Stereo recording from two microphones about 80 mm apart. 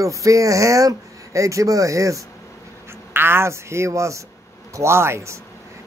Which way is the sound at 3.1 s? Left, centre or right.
Right.